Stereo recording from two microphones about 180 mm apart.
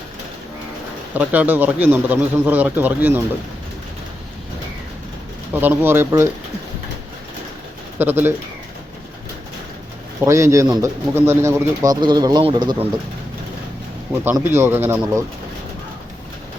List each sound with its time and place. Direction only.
1.1 s speech: 10° right (ahead or behind)
5.5 s speech: 10° right (ahead or behind)
7.9 s speech: 10° right (ahead or behind)
10.2 s speech: 15° right (ahead or behind)
14.3 s speech: 15° right (ahead or behind)